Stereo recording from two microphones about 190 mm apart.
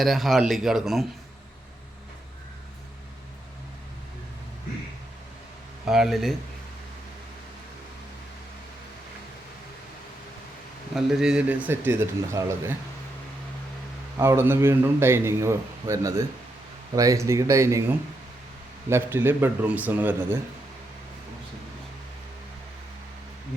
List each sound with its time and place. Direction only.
0.0 s speech: centre (ahead or behind)
5.8 s speech: centre (ahead or behind)
10.9 s a man's voice: 5° right (ahead or behind)
14.2 s a man's voice: 15° right (ahead or behind)
18.9 s a man's voice: 10° right (ahead or behind)